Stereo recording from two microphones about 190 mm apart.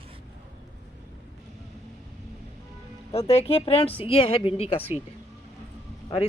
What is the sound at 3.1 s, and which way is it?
Speech, 30° left (ahead or behind).